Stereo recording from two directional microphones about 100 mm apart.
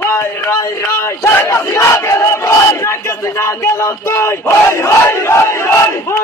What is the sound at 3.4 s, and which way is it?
Battle cry, 25° left (ahead or behind).